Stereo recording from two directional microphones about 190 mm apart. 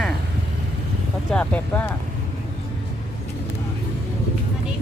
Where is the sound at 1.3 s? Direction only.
10° left (ahead or behind).